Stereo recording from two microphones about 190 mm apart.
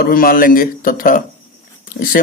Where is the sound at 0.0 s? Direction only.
50° left (ahead or behind).